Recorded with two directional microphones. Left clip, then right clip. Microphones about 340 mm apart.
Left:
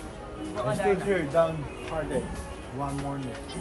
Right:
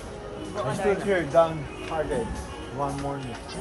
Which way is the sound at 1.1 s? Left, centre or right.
Right.